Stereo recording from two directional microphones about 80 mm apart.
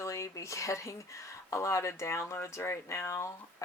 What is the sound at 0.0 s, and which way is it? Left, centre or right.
Speech, left.